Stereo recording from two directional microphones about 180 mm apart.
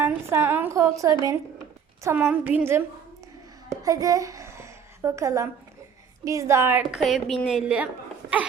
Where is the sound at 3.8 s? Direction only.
20° right (ahead or behind).